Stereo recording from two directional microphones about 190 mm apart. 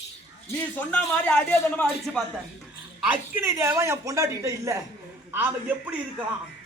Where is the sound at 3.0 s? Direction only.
10° right (ahead or behind).